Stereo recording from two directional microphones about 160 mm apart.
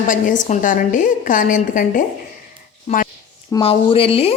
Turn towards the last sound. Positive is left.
turn(degrees=35)  # may be behind; listen again after turning